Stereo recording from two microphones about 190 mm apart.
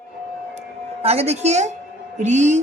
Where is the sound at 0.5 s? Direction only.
35° right (ahead or behind).